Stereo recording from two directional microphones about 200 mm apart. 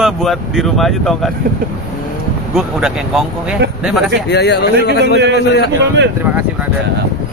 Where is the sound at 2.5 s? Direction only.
Centre (ahead or behind).